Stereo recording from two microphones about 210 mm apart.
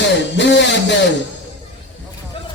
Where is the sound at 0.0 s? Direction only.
55° left (ahead or behind).